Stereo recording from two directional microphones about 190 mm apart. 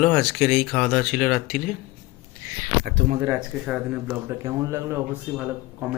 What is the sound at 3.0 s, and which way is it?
Speech, 60° right (ahead or behind).